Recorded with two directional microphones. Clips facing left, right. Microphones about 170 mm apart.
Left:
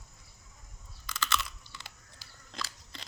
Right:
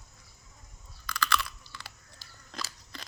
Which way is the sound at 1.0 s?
20° left (ahead or behind).